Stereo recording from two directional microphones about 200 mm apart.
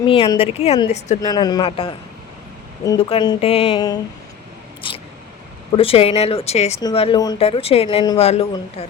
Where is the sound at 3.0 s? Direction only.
25° left (ahead or behind).